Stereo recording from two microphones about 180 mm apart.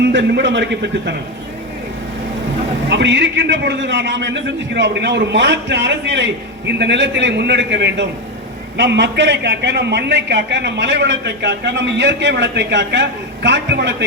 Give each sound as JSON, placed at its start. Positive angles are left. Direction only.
{"t": 0.0, "sound": "a man's voice", "side_deg": -75}
{"t": 2.9, "sound": "a man's voice", "side_deg": -80}